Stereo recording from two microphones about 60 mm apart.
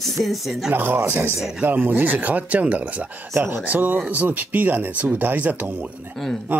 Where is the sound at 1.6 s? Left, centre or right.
Right.